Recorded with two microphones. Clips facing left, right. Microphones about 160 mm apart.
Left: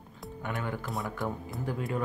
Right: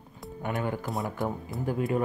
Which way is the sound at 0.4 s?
15° right (ahead or behind).